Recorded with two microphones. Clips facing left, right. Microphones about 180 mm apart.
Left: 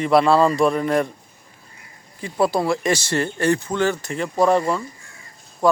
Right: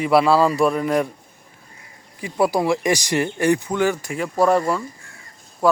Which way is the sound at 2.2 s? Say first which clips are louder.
Right 1 dB; 10° right (ahead or behind).